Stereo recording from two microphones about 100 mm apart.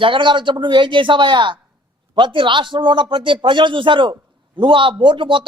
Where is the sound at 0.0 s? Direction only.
55° right (ahead or behind).